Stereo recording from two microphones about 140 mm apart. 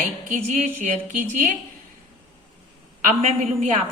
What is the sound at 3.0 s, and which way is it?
Speech, 55° right (ahead or behind).